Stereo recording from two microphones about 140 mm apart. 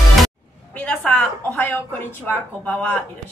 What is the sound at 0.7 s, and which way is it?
A woman's voice, 10° left (ahead or behind).